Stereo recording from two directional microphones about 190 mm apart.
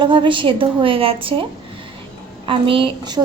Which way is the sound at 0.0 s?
25° right (ahead or behind).